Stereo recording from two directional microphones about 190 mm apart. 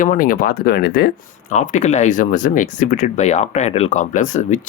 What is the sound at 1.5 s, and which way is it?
Speech, 40° left (ahead or behind).